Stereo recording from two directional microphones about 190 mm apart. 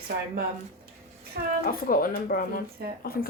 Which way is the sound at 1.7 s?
50° left (ahead or behind).